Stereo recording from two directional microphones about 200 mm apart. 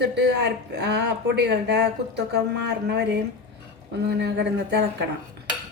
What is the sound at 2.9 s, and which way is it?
Speech, 55° right (ahead or behind).